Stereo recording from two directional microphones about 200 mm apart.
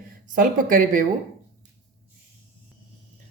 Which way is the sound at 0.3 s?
45° right (ahead or behind).